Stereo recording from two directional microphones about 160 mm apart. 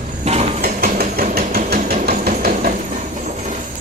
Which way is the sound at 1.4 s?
70° right (ahead or behind).